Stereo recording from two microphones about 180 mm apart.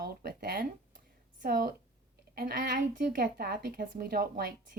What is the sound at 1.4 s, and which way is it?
A woman's voice, 55° right (ahead or behind).